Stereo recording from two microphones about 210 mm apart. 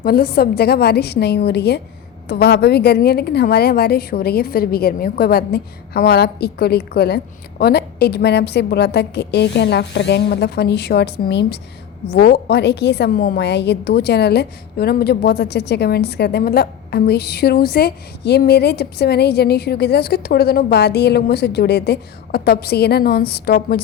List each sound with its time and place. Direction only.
0.0 s a woman's voice: 45° left (ahead or behind)